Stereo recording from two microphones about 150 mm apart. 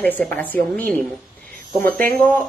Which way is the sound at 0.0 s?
10° left (ahead or behind).